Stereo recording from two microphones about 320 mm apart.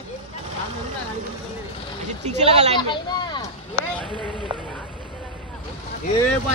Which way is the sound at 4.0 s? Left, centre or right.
Centre.